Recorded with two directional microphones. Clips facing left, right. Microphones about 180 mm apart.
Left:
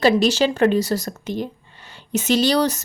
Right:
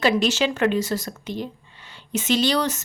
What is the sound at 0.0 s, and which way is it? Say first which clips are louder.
Speech: left 4 dB; 35° left (ahead or behind).